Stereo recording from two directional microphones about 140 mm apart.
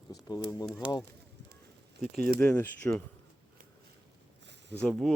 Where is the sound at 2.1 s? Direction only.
90° right.